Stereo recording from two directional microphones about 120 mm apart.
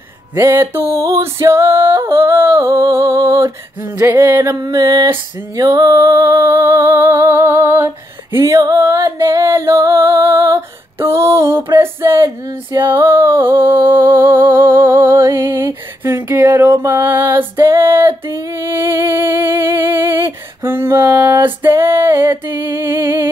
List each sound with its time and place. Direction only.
0.4 s female singing: 20° right (ahead or behind)
12.9 s music: 20° right (ahead or behind)
16.0 s female singing: 20° right (ahead or behind)
21.6 s music: 20° right (ahead or behind)